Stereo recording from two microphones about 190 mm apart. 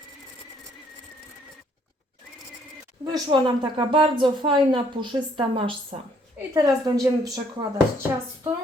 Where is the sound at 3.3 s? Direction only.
25° right (ahead or behind).